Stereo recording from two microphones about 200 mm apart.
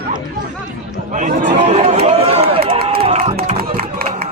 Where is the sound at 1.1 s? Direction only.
35° right (ahead or behind).